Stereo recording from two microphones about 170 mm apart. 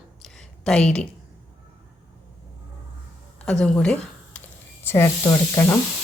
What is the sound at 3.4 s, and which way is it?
Speech, 5° left (ahead or behind).